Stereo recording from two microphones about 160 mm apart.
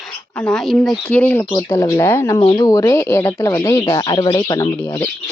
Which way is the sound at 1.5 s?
20° left (ahead or behind).